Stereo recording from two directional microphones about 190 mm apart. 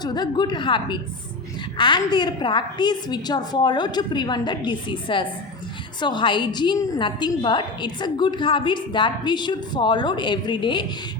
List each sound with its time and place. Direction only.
0.0 s a woman's voice: 20° left (ahead or behind)